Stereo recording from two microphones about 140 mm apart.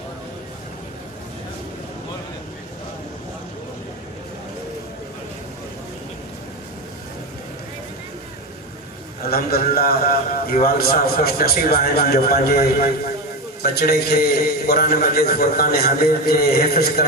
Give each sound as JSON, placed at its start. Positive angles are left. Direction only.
{"t": 9.3, "sound": "a man's voice", "side_deg": 90}